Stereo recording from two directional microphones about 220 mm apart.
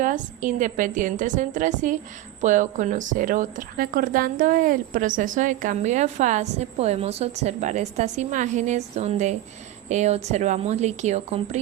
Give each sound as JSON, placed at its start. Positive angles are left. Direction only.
{"t": 0.0, "sound": "a woman's voice", "side_deg": -35}